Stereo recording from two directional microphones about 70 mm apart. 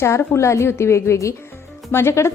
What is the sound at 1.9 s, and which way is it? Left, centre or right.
Speech, left.